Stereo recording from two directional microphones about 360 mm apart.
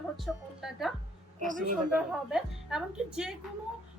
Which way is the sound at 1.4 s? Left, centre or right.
Right.